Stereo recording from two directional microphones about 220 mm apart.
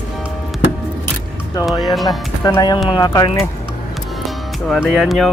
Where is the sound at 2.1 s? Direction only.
20° left (ahead or behind).